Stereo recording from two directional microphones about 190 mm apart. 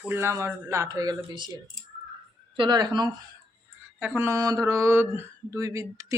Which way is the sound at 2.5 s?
25° right (ahead or behind).